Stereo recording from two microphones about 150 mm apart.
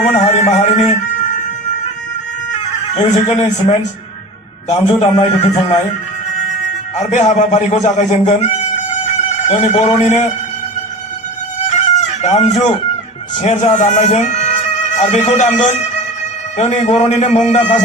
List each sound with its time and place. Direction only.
0.3 s a sound: 45° left (ahead or behind)
3.0 s speech: 45° left (ahead or behind)
4.9 s a man's voice: 40° left (ahead or behind)
6.9 s a man's voice: 50° left (ahead or behind)
11.9 s chicken: 50° left (ahead or behind)
13.4 s speech: 50° left (ahead or behind)